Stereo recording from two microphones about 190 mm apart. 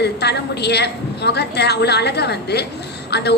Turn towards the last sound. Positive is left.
turn(degrees=60)  # may be behind; listen again after turning